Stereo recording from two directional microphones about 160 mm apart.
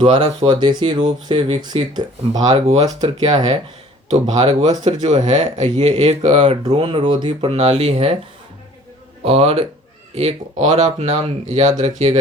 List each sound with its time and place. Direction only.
0.0 s speech: 30° right (ahead or behind)
2.5 s speech: 45° right (ahead or behind)
2.7 s speech: 25° right (ahead or behind)
4.1 s speech: 45° right (ahead or behind)
9.2 s speech: 40° right (ahead or behind)